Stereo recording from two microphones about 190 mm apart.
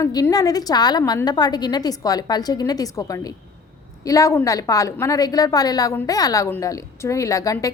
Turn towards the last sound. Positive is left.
turn(degrees=15)  # may be behind; listen again after turning